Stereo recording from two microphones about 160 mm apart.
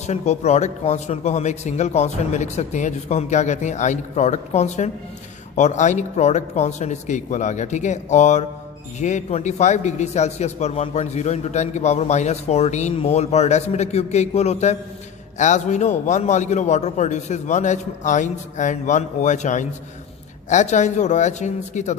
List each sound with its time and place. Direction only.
0.0 s a man's voice: 45° left (ahead or behind)